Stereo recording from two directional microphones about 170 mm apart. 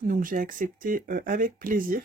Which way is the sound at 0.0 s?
55° right (ahead or behind).